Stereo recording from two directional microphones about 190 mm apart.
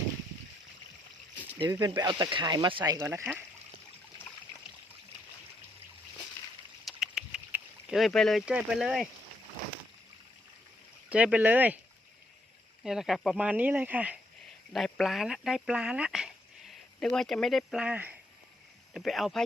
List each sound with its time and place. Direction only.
1.5 s speech: 20° right (ahead or behind)
6.8 s rowboat: centre (ahead or behind)
11.1 s speech: 5° right (ahead or behind)
12.8 s speech: centre (ahead or behind)